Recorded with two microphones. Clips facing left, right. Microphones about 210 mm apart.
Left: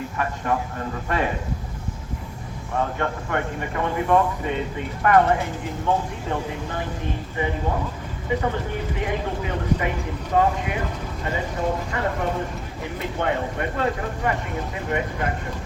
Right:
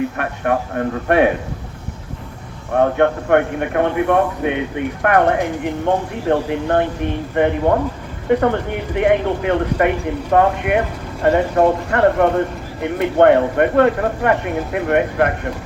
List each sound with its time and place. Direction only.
0.2 s speech: 65° right (ahead or behind)
2.7 s speech: 65° right (ahead or behind)